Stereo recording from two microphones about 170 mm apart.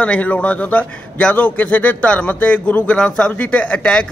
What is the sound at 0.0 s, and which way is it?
A man's voice, 10° left (ahead or behind).